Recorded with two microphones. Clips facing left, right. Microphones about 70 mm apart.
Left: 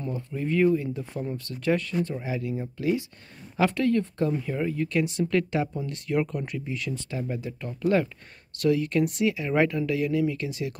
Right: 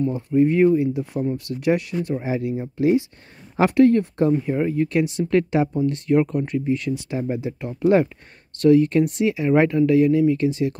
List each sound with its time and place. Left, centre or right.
0.0 s speech: centre
5.0 s speech: centre
7.2 s speech: right
8.5 s speech: centre